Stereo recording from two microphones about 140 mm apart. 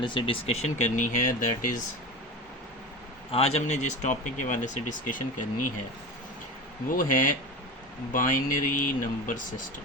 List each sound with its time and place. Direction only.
0.0 s speech: 35° left (ahead or behind); by 1.8 s 70° left (ahead or behind)
3.3 s speech: 50° left (ahead or behind); by 5.2 s 65° left (ahead or behind)
6.9 s speech: 75° left (ahead or behind)